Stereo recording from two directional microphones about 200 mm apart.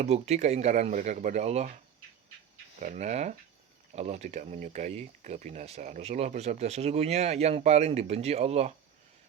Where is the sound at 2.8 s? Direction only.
35° right (ahead or behind).